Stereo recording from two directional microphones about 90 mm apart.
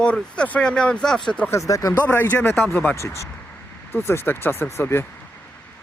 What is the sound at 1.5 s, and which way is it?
Speech, 35° left (ahead or behind).